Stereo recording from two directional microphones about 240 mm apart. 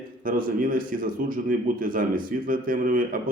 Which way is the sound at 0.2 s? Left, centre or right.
Right.